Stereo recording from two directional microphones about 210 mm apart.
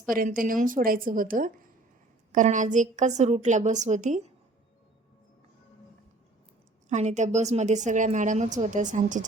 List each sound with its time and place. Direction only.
0.1 s a woman's voice: 40° right (ahead or behind)
6.8 s a woman's voice: 35° right (ahead or behind)